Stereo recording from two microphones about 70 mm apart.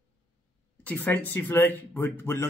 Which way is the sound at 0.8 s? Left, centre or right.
Left.